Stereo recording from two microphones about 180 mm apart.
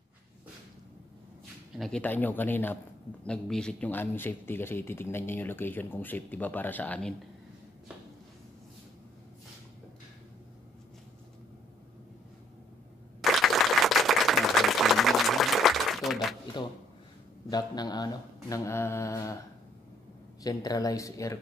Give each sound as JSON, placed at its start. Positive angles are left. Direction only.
{"t": 1.8, "sound": "speech", "side_deg": 5}
{"t": 13.2, "sound": "applause", "side_deg": 0}
{"t": 17.5, "sound": "speech", "side_deg": 20}
{"t": 20.4, "sound": "speech", "side_deg": 20}